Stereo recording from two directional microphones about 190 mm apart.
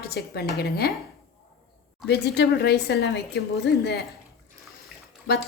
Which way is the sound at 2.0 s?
60° left (ahead or behind).